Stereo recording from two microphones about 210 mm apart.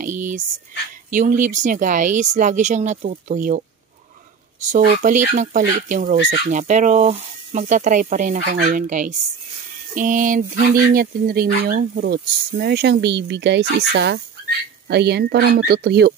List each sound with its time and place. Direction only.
1.1 s speech: 40° right (ahead or behind)